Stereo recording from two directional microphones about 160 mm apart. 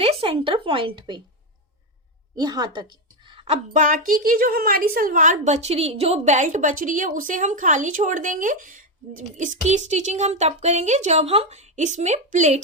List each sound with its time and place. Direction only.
0.0 s speech: 35° right (ahead or behind)
2.3 s a woman's voice: 25° right (ahead or behind); by 12.5 s 45° right (ahead or behind)